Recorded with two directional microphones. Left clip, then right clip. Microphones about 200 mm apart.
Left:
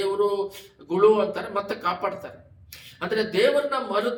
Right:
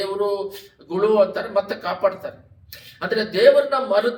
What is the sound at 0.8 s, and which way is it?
A man's voice, 5° left (ahead or behind).